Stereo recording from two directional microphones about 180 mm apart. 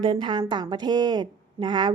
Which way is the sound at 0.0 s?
25° right (ahead or behind).